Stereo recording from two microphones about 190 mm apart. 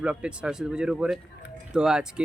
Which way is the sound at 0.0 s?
5° right (ahead or behind).